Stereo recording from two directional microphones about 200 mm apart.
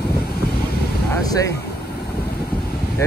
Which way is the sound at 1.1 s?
20° left (ahead or behind).